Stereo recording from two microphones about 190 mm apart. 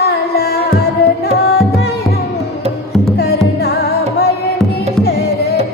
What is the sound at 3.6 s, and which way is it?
Music, 55° left (ahead or behind).